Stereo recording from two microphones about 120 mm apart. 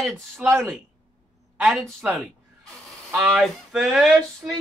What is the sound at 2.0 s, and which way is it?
Speech, 10° right (ahead or behind).